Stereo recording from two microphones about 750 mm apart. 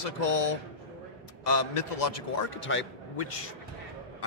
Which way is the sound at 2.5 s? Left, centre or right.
Centre.